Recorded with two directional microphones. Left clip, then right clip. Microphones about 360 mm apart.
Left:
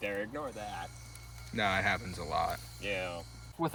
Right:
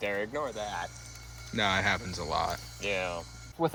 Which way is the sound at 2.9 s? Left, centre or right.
Centre.